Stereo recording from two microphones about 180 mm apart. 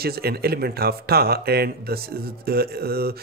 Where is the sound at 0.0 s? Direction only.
60° right (ahead or behind).